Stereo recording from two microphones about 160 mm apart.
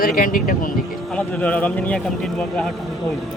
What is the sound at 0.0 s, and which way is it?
Speech, 60° left (ahead or behind).